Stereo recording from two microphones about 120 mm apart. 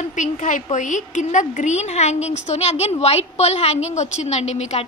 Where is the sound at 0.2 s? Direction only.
80° left.